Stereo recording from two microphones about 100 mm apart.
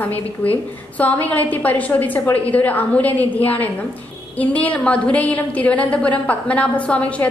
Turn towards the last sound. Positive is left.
turn(degrees=15)  # may be behind; listen again after turning